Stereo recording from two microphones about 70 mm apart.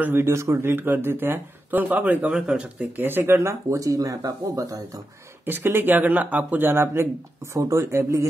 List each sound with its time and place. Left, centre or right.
0.0 s a man's voice: right
0.3 s a man's voice: right; by 2.9 s centre
3.0 s speech: right
5.4 s a man's voice: right
7.5 s speech: right